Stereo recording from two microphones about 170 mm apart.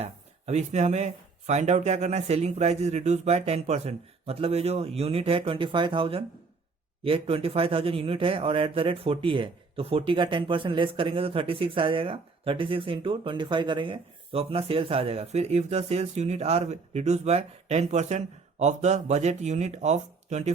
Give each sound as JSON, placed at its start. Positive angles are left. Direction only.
{"t": 0.0, "sound": "speech", "side_deg": -40}